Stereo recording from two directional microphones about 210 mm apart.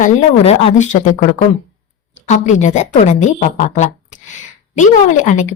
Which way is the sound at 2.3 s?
35° left (ahead or behind).